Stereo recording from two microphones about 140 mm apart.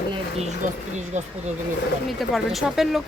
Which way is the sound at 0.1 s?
45° right (ahead or behind).